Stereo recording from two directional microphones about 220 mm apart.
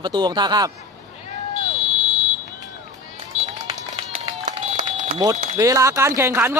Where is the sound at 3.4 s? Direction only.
35° right (ahead or behind).